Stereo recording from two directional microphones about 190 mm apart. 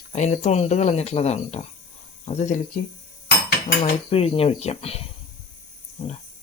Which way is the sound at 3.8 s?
30° left (ahead or behind).